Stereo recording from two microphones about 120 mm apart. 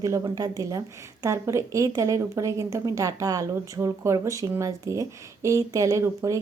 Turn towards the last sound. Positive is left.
turn(degrees=-25)  # may be behind; listen again after turning